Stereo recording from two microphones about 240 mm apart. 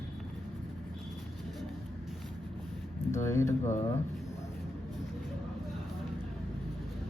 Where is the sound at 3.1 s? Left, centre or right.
Centre.